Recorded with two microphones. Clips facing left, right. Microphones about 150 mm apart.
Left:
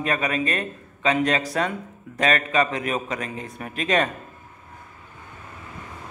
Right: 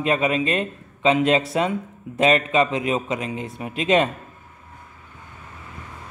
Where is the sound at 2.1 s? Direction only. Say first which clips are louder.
Right 3 dB; 25° right (ahead or behind).